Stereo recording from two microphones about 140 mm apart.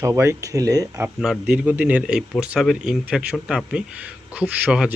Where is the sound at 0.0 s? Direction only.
20° right (ahead or behind).